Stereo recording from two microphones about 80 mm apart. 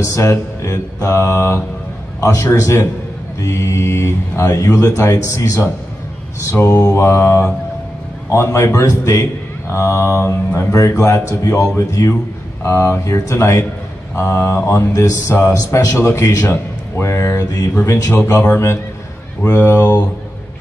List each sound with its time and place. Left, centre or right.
0.0 s a man's voice: left
6.7 s a man's voice: left